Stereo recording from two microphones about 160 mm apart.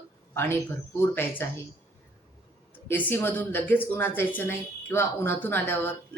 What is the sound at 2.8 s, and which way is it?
Speech, 10° left (ahead or behind).